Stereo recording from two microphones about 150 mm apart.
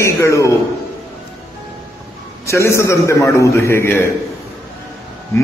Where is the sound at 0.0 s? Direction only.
20° left (ahead or behind).